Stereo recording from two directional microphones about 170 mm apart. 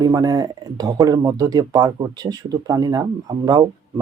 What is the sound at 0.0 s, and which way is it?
Speech, 20° right (ahead or behind).